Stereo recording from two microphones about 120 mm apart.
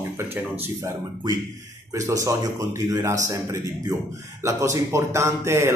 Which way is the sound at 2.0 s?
25° right (ahead or behind).